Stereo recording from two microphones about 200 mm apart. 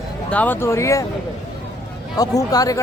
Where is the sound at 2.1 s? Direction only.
20° left (ahead or behind).